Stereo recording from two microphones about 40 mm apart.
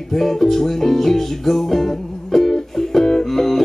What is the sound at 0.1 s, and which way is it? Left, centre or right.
Music, centre.